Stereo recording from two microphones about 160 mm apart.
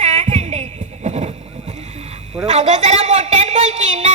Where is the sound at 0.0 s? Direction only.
45° right (ahead or behind).